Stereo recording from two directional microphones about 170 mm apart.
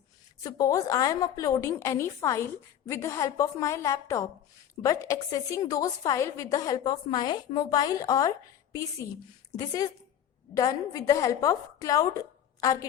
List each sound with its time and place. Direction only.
0.4 s a woman's voice: 20° left (ahead or behind)